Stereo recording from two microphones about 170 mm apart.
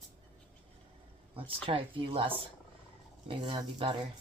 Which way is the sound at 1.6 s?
30° right (ahead or behind).